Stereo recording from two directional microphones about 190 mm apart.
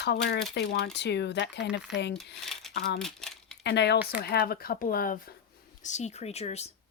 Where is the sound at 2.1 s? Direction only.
Centre (ahead or behind).